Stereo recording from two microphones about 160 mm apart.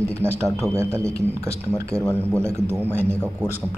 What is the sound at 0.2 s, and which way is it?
A man's voice, 15° right (ahead or behind).